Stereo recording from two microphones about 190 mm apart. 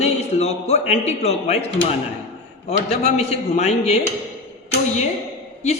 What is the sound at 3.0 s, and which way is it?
Speech, 35° left (ahead or behind).